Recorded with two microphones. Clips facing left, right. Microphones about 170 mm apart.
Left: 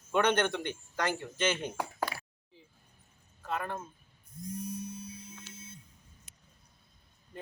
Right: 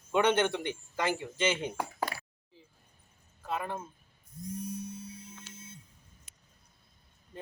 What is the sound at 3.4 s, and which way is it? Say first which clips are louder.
Speech: right 1 dB; 10° right (ahead or behind).